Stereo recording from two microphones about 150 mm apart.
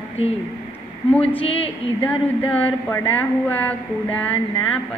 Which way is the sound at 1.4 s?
40° left (ahead or behind).